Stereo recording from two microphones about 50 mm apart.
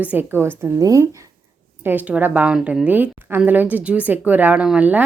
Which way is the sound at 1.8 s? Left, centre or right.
Right.